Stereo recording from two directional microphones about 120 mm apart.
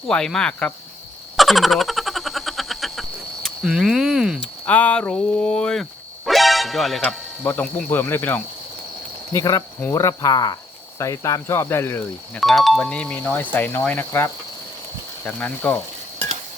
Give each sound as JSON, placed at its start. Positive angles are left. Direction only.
{"t": 0.1, "sound": "speech", "side_deg": 5}
{"t": 1.4, "sound": "frog", "side_deg": 0}
{"t": 4.4, "sound": "speech", "side_deg": 10}
{"t": 7.4, "sound": "speech", "side_deg": 10}
{"t": 9.3, "sound": "speech", "side_deg": 25}
{"t": 12.4, "sound": "speech", "side_deg": 0}